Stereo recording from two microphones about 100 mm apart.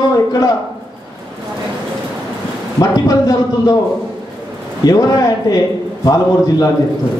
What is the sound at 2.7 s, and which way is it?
A man's voice, 35° left (ahead or behind).